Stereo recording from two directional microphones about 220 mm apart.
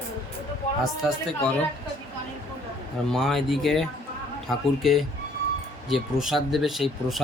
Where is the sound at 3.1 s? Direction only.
Centre (ahead or behind).